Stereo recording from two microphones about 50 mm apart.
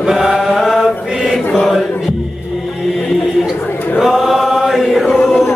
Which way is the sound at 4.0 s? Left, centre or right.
Centre.